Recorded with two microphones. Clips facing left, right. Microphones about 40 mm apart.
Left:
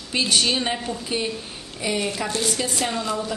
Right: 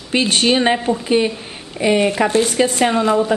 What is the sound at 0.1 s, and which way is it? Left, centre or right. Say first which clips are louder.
A woman's voice: right 6 dB; right.